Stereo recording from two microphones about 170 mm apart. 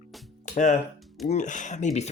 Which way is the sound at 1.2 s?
45° left (ahead or behind).